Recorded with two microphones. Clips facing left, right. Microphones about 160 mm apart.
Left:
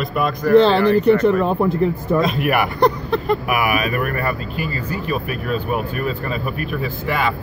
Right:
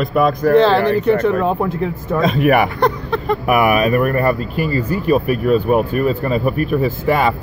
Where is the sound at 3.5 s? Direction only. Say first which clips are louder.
Right 6 dB; 40° right (ahead or behind).